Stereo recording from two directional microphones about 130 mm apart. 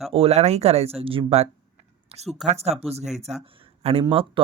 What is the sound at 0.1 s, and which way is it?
Speech, 50° right (ahead or behind).